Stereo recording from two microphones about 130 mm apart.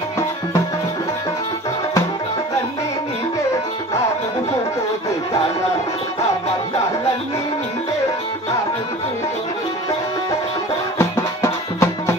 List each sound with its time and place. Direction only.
11.0 s music: 20° left (ahead or behind)